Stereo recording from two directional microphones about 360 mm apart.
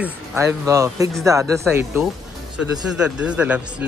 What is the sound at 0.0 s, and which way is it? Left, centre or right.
A man's voice, centre.